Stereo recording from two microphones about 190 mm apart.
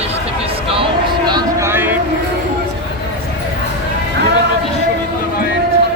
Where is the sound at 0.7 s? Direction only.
25° right (ahead or behind).